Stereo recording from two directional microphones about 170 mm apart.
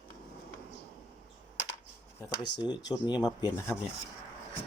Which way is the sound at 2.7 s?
25° left (ahead or behind).